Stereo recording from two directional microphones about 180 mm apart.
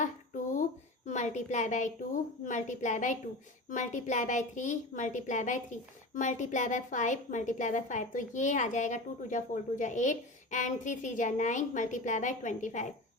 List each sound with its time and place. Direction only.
1.0 s a woman's voice: 40° left (ahead or behind)